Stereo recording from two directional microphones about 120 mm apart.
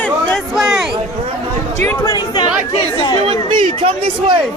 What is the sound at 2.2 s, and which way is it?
Chatter, 35° left (ahead or behind).